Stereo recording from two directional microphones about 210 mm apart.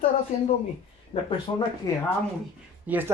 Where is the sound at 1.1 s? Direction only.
25° left (ahead or behind).